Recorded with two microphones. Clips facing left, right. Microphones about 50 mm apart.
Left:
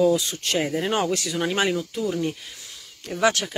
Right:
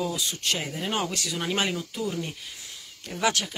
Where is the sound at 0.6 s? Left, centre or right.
Centre.